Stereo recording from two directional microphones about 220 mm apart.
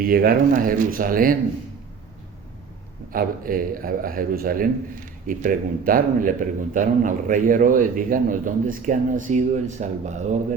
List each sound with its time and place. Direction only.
0.0 s a man's voice: 40° right (ahead or behind)
3.1 s a man's voice: 40° right (ahead or behind)